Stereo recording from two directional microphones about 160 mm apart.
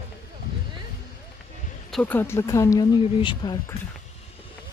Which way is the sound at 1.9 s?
5° left (ahead or behind).